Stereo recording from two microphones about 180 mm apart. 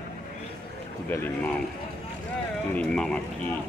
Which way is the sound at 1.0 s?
10° left (ahead or behind).